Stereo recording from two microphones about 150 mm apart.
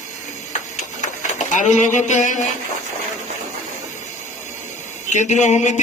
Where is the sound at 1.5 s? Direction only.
55° left (ahead or behind).